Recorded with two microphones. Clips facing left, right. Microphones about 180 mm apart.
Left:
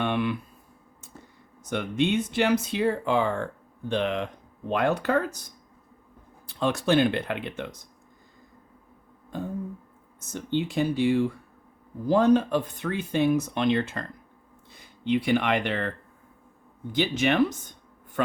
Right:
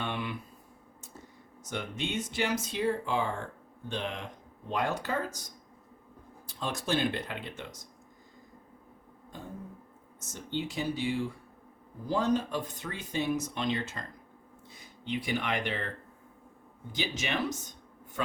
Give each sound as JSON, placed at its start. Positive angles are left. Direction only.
{"t": 0.0, "sound": "a sound", "side_deg": 60}
{"t": 1.6, "sound": "speech", "side_deg": 60}
{"t": 6.5, "sound": "speech", "side_deg": 65}
{"t": 10.2, "sound": "speech", "side_deg": 60}
{"t": 16.9, "sound": "speech", "side_deg": 60}